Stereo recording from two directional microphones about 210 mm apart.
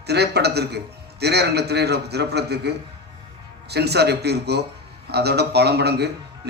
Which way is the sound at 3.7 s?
50° right (ahead or behind).